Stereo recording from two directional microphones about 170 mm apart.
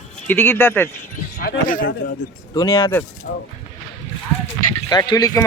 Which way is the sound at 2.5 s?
25° left (ahead or behind).